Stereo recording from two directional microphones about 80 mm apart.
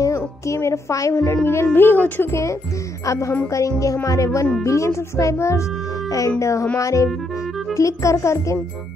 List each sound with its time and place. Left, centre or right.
0.0 s speech: left
3.1 s speech: left